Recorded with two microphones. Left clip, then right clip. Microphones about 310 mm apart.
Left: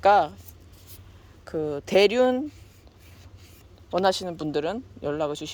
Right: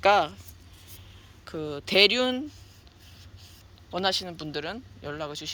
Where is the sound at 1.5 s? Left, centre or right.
Centre.